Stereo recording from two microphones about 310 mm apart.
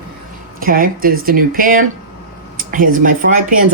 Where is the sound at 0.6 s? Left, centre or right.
Right.